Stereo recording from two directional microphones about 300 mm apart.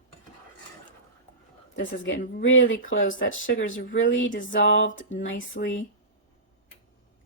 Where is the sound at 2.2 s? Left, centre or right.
Left.